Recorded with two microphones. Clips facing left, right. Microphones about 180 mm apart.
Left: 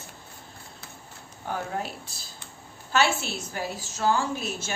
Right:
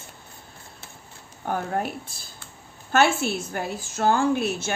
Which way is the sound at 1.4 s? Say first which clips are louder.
Right 5 dB; 50° right (ahead or behind).